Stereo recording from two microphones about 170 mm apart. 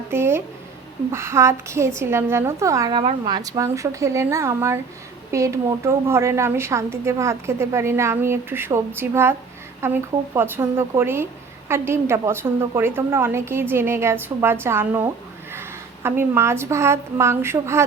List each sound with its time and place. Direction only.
0.1 s a woman's voice: 15° right (ahead or behind)